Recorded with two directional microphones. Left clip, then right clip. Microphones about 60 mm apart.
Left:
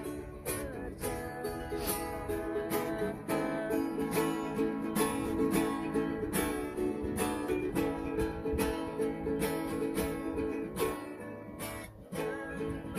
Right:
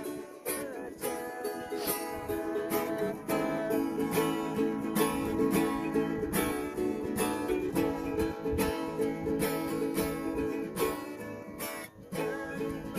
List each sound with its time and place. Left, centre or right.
1.9 s music: centre
7.2 s music: centre
7.8 s music: right